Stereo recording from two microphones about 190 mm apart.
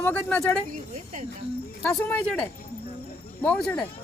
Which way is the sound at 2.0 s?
10° left (ahead or behind).